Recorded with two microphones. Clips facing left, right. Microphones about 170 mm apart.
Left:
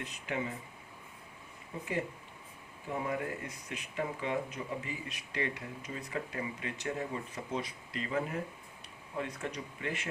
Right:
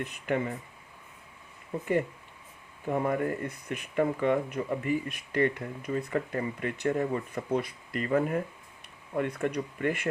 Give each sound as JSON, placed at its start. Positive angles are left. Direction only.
{"t": 0.0, "sound": "speech", "side_deg": -55}
{"t": 2.9, "sound": "speech", "side_deg": -55}